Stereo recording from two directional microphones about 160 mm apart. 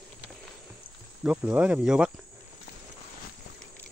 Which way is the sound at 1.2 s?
10° right (ahead or behind).